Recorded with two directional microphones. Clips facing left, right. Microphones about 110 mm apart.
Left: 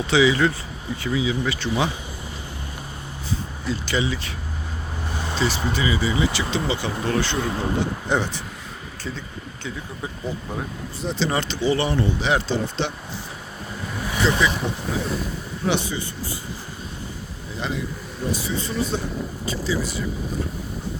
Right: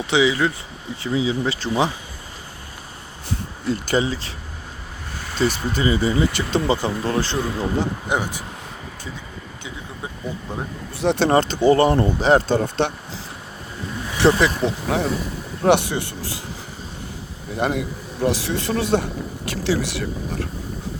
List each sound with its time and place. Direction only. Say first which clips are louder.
0.1 s speech: even; 20° right (ahead or behind)
3.7 s speech: right 4 dB; 45° right (ahead or behind)
5.4 s speech: right 3 dB; 45° right (ahead or behind)
8.1 s speech: left 1 dB; 15° right (ahead or behind)
11.0 s speech: right 7 dB; 65° right (ahead or behind)
11.3 s speech: right 7 dB; 45° right (ahead or behind)
14.2 s speech: right 5 dB; 65° right (ahead or behind)
14.8 s speech: right 6 dB; 75° right (ahead or behind)
15.6 s speech: right 7 dB; 65° right (ahead or behind); by 16.4 s 80° right
17.5 s speech: right 6 dB; 60° right (ahead or behind); by 20.5 s 75° right (ahead or behind)